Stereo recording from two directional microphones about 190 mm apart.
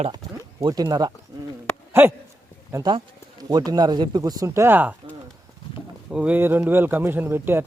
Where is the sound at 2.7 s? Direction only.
20° right (ahead or behind).